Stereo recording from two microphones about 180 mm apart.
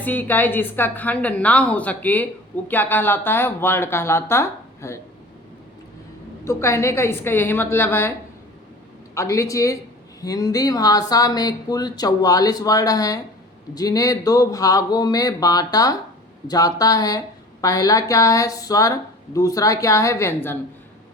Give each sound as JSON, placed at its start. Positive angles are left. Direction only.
{"t": 0.0, "sound": "speech", "side_deg": 10}
{"t": 6.4, "sound": "speech", "side_deg": 15}
{"t": 9.1, "sound": "speech", "side_deg": 15}